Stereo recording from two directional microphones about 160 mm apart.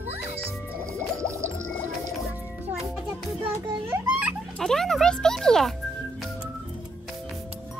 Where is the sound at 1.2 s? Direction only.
15° right (ahead or behind).